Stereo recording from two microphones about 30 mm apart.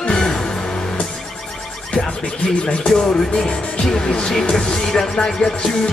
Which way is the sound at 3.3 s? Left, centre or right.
Left.